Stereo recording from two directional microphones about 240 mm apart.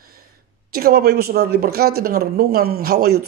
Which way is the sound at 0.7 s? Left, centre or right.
Right.